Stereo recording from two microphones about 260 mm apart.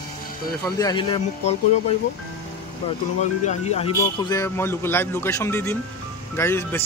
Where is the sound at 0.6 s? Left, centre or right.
Centre.